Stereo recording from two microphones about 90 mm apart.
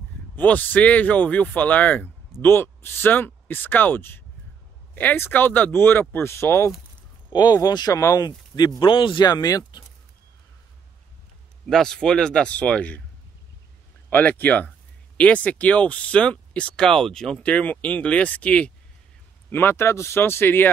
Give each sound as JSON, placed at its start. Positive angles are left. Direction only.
{"t": 0.4, "sound": "speech", "side_deg": 20}
{"t": 7.3, "sound": "speech", "side_deg": 50}
{"t": 8.5, "sound": "speech", "side_deg": 55}
{"t": 9.2, "sound": "speech", "side_deg": 45}
{"t": 11.6, "sound": "speech", "side_deg": 5}
{"t": 14.1, "sound": "speech", "side_deg": 20}
{"t": 19.5, "sound": "speech", "side_deg": 25}